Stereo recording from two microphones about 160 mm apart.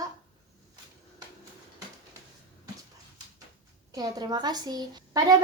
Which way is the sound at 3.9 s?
25° right (ahead or behind).